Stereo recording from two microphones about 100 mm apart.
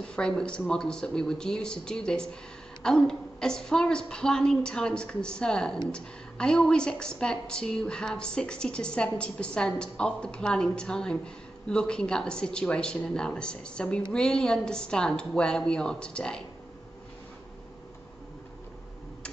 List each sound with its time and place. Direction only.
0.1 s a woman's voice: 5° left (ahead or behind)